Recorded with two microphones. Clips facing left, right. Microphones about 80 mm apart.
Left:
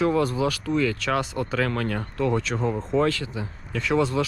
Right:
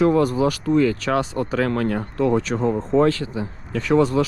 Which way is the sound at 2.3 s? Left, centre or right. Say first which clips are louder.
Right 5 dB; right.